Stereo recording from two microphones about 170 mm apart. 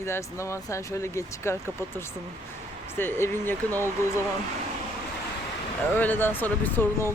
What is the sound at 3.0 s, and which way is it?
Speech, 15° left (ahead or behind).